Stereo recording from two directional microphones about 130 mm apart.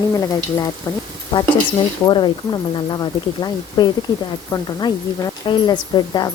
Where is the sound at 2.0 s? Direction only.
35° left (ahead or behind).